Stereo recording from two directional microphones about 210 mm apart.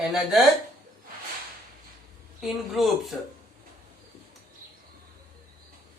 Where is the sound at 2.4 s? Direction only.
Centre (ahead or behind).